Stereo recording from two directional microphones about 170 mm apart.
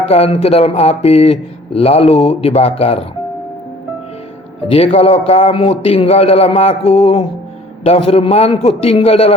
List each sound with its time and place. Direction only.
0.0 s a man's voice: 35° left (ahead or behind)
4.7 s a man's voice: 35° left (ahead or behind)